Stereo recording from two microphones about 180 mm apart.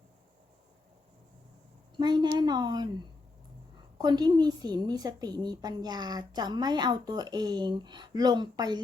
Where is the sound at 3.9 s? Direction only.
25° right (ahead or behind).